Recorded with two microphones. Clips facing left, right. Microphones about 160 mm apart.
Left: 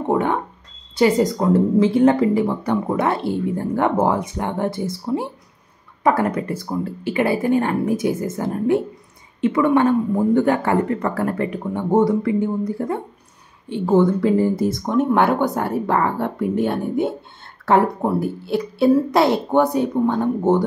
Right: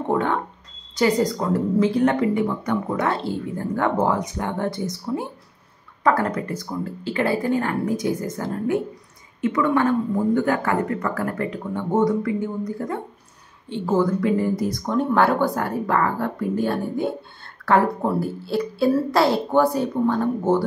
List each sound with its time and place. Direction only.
0.1 s a woman's voice: 20° left (ahead or behind)